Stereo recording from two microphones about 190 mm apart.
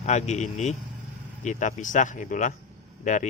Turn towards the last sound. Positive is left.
turn(degrees=40)  # may be behind; listen again after turning